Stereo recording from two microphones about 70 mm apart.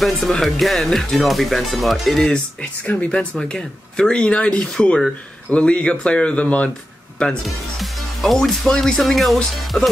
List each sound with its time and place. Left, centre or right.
0.0 s speech: centre
2.3 s speech: centre
7.4 s speech: centre
9.7 s speech: centre